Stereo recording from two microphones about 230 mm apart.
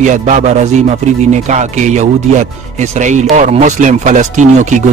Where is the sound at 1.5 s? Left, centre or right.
Right.